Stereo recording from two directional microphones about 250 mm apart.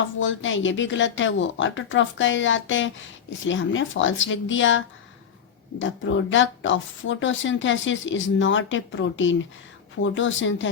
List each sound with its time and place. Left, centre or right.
0.2 s speech: left
5.8 s speech: left